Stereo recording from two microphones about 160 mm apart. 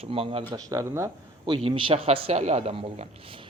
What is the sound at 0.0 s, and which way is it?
Speech, 35° right (ahead or behind).